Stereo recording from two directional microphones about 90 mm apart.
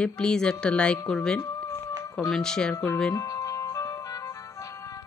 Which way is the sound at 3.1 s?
40° left (ahead or behind).